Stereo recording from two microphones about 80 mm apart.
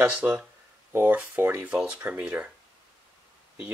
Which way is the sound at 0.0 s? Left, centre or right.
Centre.